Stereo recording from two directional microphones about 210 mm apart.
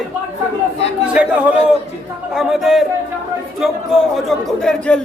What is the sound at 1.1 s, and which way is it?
Speech, 5° right (ahead or behind).